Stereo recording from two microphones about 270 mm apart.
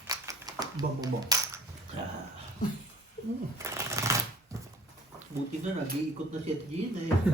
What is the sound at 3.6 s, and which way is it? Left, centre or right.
Speech, centre.